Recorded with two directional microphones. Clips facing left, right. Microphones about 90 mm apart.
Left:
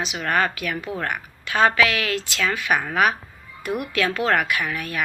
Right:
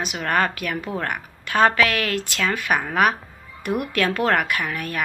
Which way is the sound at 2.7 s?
5° right (ahead or behind).